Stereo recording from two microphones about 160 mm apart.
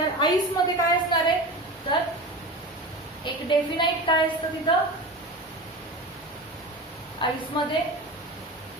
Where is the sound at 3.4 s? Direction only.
30° left (ahead or behind).